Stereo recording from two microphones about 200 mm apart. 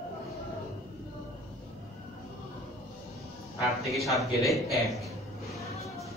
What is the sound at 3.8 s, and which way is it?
A man's voice, centre (ahead or behind).